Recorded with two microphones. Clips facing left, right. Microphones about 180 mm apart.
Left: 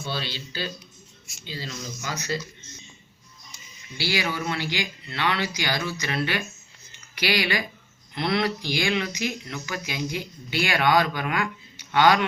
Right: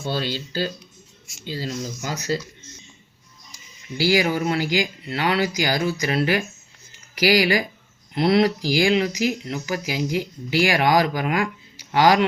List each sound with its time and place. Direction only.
0.0 s speech: 45° right (ahead or behind)
4.0 s speech: 40° right (ahead or behind)